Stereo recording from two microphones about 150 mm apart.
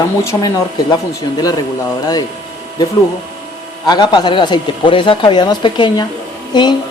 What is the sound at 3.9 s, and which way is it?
A woman's voice, 30° left (ahead or behind).